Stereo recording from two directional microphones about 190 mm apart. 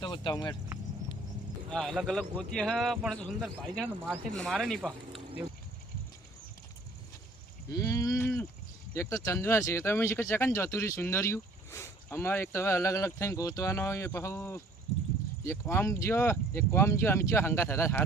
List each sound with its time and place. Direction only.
0.0 s speech: 25° left (ahead or behind)
1.7 s speech: centre (ahead or behind)
7.7 s a sound: 15° left (ahead or behind)
8.9 s speech: 15° left (ahead or behind)